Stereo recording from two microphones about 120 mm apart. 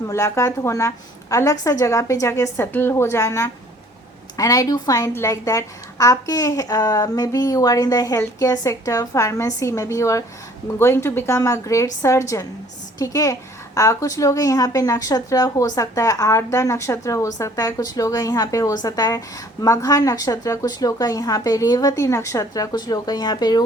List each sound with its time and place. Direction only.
0.1 s a woman's voice: 25° left (ahead or behind)